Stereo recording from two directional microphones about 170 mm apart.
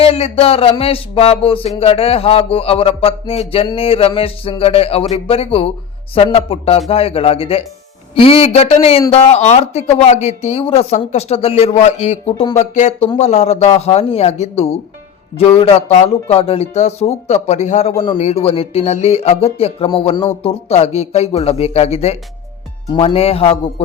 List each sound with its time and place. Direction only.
0.0 s speech: 35° left (ahead or behind)